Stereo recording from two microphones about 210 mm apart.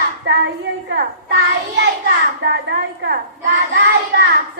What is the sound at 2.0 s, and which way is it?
A child's voice, 55° right (ahead or behind).